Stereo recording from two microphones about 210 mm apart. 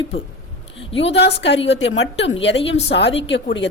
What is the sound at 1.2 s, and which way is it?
A woman's voice, 55° left (ahead or behind).